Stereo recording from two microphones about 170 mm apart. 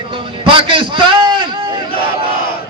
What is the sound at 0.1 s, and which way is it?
Speech, 30° right (ahead or behind).